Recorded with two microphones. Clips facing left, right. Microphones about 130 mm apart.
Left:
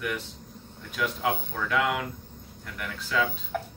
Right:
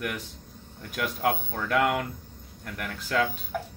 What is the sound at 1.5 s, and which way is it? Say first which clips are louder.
Speech: right 2 dB; 45° right (ahead or behind).